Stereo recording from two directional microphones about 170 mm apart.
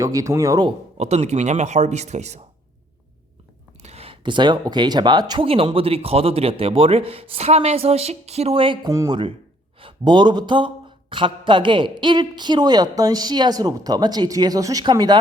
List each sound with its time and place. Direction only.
0.0 s a woman's voice: 20° right (ahead or behind)
0.9 s speech: 40° right (ahead or behind)
3.8 s a woman's voice: 35° right (ahead or behind)